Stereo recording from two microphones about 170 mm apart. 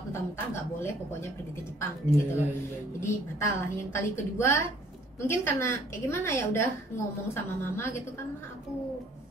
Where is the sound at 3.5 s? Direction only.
15° left (ahead or behind).